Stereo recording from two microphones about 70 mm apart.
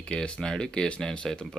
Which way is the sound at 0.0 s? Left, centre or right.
Centre.